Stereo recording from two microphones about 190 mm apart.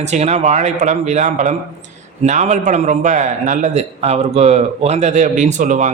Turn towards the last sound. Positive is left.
turn(degrees=-40)  # may be behind; listen again after turning